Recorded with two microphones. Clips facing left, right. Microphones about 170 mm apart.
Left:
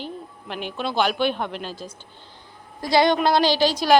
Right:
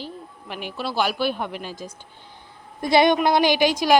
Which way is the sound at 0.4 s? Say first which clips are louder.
Left 1 dB; 5° right (ahead or behind).